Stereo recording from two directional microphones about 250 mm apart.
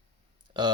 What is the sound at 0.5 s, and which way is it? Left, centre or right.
Speech, centre.